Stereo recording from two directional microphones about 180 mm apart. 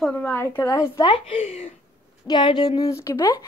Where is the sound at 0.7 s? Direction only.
20° left (ahead or behind).